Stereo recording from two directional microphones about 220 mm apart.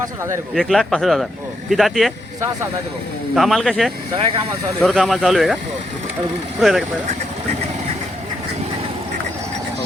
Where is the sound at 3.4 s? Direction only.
Centre (ahead or behind).